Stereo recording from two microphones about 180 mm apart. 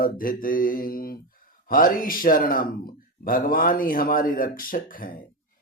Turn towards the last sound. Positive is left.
turn(degrees=50)  # may be behind; listen again after turning